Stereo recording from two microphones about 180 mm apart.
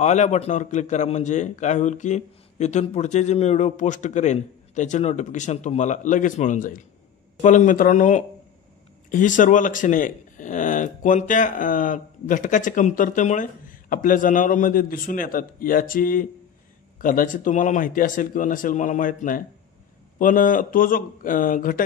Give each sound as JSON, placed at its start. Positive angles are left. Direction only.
{"t": 0.0, "sound": "a man's voice", "side_deg": 40}